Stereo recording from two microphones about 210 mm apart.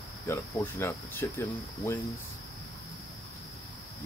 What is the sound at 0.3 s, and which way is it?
Speech, 10° left (ahead or behind).